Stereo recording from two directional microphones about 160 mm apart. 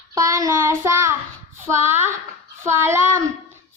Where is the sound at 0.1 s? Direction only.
20° right (ahead or behind).